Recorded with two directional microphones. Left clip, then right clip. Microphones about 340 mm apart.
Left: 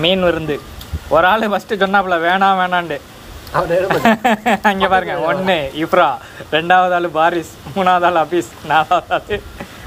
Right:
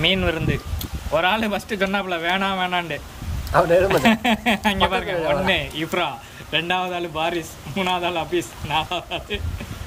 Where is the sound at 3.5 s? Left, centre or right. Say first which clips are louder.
Left 1 dB; centre.